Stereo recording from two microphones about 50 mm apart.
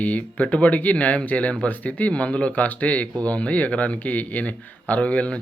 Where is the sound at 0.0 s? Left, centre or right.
Left.